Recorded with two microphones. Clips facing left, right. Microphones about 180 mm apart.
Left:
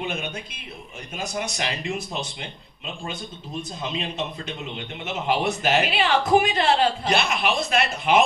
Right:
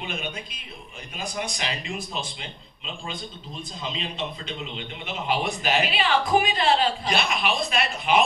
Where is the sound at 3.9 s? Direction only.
50° left (ahead or behind).